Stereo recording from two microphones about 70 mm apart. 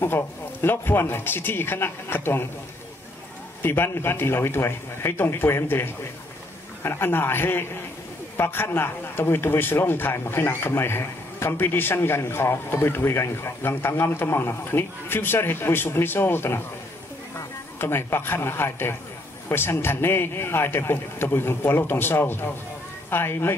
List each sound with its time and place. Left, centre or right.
0.0 s a man's voice: left
3.6 s a man's voice: left
17.7 s a man's voice: left